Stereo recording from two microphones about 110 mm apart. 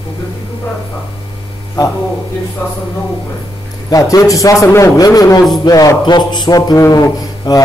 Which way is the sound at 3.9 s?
35° left (ahead or behind).